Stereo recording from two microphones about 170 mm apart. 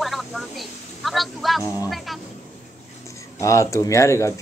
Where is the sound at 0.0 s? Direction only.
Centre (ahead or behind).